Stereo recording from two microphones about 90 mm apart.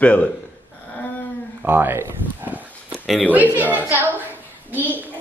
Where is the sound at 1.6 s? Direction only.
20° right (ahead or behind).